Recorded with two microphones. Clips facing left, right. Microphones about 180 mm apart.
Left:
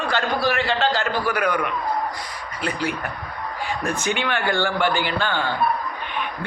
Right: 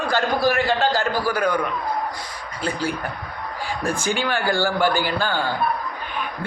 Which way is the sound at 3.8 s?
30° right (ahead or behind).